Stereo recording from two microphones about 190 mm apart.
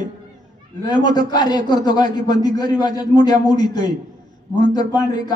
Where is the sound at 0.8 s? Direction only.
20° left (ahead or behind).